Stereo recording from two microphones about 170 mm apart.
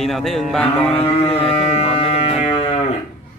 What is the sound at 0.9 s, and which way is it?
Music, 35° left (ahead or behind).